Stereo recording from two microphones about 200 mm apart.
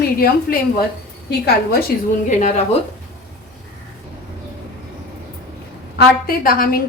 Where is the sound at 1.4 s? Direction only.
50° left (ahead or behind).